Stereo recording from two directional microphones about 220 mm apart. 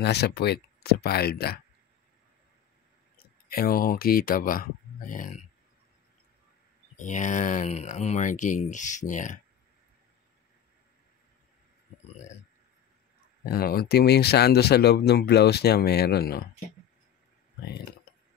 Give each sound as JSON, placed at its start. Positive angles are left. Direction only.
{"t": 0.0, "sound": "speech", "side_deg": 50}
{"t": 3.2, "sound": "speech", "side_deg": 40}
{"t": 7.0, "sound": "speech", "side_deg": 35}
{"t": 13.4, "sound": "speech", "side_deg": 45}